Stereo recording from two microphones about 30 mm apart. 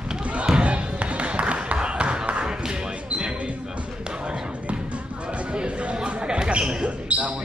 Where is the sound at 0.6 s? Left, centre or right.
Right.